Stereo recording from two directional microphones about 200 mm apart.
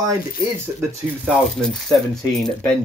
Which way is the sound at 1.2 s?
Centre (ahead or behind).